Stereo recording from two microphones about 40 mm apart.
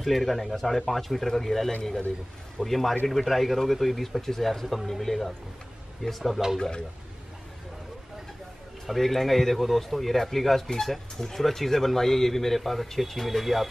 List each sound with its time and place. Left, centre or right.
0.0 s speech: centre
1.8 s a man's voice: centre
2.6 s speech: centre
8.8 s speech: centre